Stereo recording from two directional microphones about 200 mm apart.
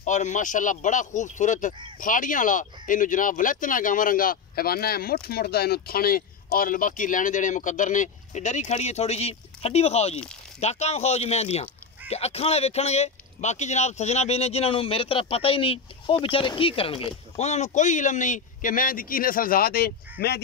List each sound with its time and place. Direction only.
0.0 s speech: 40° left (ahead or behind)